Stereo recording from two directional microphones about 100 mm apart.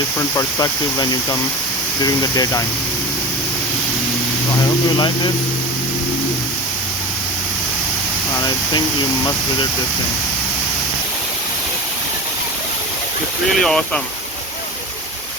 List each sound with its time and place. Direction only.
0.2 s speech: 35° left (ahead or behind)
4.9 s speech: 50° left (ahead or behind)
8.3 s speech: 40° left (ahead or behind)
13.5 s speech: 5° left (ahead or behind)